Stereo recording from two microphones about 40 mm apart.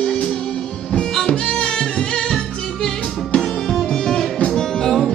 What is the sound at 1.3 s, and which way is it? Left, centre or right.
Music, left.